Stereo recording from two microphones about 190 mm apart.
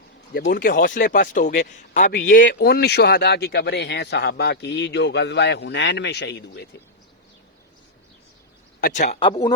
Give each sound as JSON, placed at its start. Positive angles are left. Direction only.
{"t": 0.3, "sound": "a man's voice", "side_deg": 50}
{"t": 8.8, "sound": "speech", "side_deg": 40}
{"t": 9.3, "sound": "speech", "side_deg": 20}